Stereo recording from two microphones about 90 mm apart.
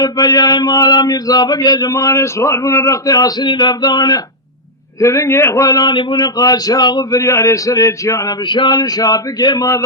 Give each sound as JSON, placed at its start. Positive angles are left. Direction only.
{"t": 0.0, "sound": "speech", "side_deg": 45}
{"t": 4.9, "sound": "a man's voice", "side_deg": 35}
{"t": 5.6, "sound": "speech", "side_deg": 50}
{"t": 7.2, "sound": "speech", "side_deg": 35}